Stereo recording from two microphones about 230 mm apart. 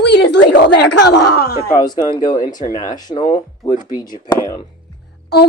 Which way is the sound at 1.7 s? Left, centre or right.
Centre.